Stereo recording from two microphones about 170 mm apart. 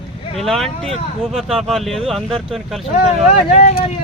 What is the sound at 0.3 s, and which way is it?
Speech, centre (ahead or behind).